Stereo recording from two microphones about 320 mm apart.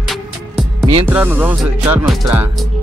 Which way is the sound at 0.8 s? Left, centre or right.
Centre.